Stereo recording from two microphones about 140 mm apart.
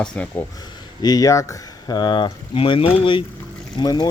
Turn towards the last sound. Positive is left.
turn(degrees=30)  # may be behind; listen again after turning